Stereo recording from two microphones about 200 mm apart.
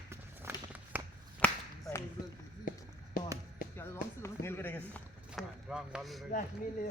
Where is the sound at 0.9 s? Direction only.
10° right (ahead or behind).